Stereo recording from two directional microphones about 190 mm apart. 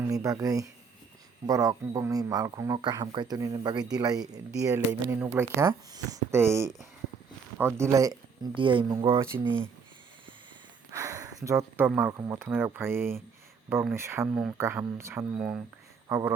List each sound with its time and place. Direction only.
0.1 s speech: 20° right (ahead or behind)
10.9 s a sound: 15° right (ahead or behind)
11.4 s speech: 15° right (ahead or behind)